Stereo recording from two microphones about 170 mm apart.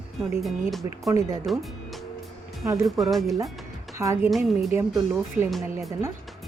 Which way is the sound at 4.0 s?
20° right (ahead or behind).